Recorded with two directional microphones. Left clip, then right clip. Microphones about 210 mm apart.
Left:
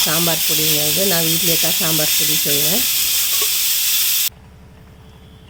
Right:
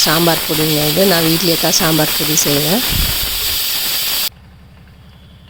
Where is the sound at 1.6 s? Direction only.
45° right (ahead or behind).